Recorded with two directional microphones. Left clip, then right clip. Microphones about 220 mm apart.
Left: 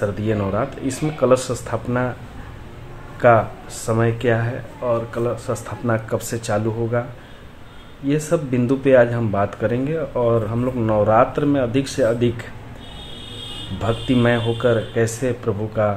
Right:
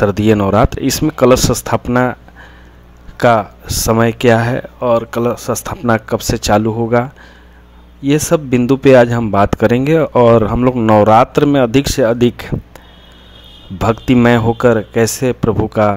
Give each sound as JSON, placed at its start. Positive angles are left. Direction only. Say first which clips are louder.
{"t": 0.0, "sound": "speech", "louder": "right 10 dB", "side_deg": -50}
{"t": 3.2, "sound": "speech", "louder": "right 3 dB", "side_deg": -50}
{"t": 8.1, "sound": "speech", "louder": "right 7 dB", "side_deg": -45}
{"t": 13.7, "sound": "speech", "louder": "right 8 dB", "side_deg": -45}